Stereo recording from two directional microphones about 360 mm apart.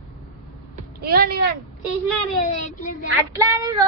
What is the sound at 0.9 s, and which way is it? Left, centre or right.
Speech, right.